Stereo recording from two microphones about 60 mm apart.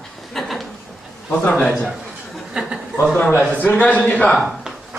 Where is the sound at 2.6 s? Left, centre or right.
Centre.